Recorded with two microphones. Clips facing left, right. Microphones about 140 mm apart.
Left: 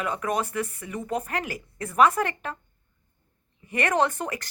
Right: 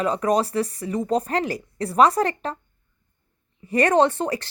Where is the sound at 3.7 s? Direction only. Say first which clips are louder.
Right 6 dB; 35° right (ahead or behind).